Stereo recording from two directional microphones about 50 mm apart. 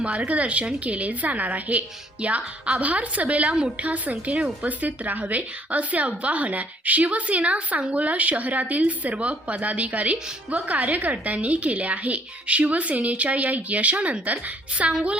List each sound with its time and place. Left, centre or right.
0.3 s a woman's voice: right